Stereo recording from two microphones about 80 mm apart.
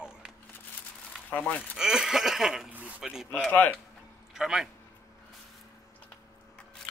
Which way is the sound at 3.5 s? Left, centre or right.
Left.